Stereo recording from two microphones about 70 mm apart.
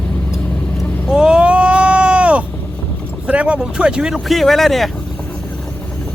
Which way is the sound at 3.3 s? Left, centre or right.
Centre.